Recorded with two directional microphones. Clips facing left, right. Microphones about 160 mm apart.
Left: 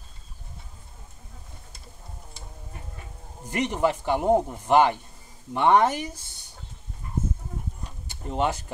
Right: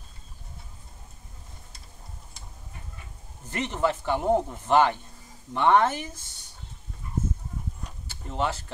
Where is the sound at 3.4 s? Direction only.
15° left (ahead or behind).